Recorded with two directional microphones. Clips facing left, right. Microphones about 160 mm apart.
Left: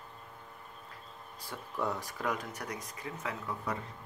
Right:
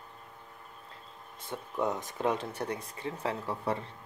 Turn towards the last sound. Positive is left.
turn(degrees=-30)  # may be behind; listen again after turning